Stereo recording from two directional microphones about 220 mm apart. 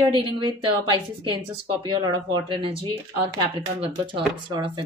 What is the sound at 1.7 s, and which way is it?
Speech, 20° right (ahead or behind).